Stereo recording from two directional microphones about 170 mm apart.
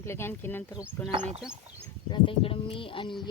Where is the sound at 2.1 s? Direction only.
30° left (ahead or behind).